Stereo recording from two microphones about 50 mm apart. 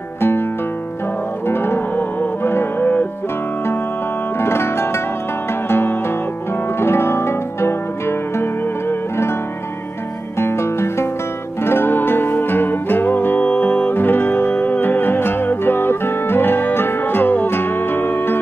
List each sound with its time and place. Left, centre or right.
0.2 s music: left
1.5 s music: left
2.8 s music: left
4.4 s music: left
10.4 s music: left
11.6 s music: left